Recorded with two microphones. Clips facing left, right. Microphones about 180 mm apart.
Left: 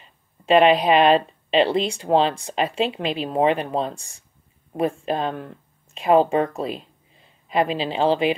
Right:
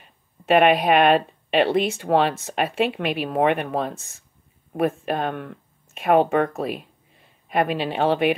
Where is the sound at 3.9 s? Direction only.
Centre (ahead or behind).